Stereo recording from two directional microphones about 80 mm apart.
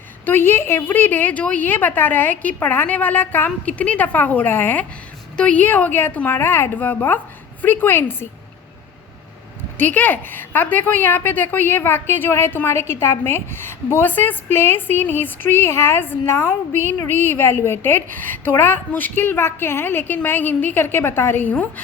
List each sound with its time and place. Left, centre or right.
0.3 s a woman's voice: left
9.7 s a woman's voice: left